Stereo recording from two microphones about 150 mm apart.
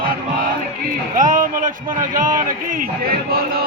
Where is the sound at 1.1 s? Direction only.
60° right (ahead or behind).